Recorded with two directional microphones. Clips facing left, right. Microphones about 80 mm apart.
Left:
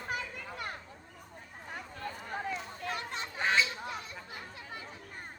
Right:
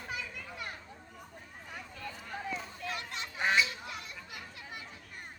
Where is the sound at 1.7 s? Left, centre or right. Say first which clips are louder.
Left 3 dB; left.